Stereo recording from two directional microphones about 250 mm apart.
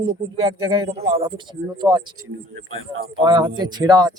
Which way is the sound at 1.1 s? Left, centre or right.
Centre.